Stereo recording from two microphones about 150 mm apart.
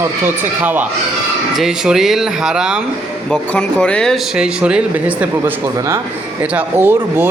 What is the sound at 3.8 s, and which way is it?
Speech, 5° left (ahead or behind).